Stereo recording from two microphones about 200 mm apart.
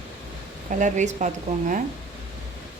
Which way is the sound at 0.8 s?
35° right (ahead or behind).